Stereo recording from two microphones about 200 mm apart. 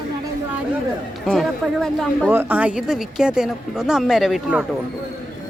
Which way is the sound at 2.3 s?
10° right (ahead or behind).